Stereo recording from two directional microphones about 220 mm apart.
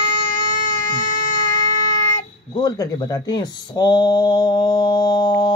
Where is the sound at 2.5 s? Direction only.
15° left (ahead or behind).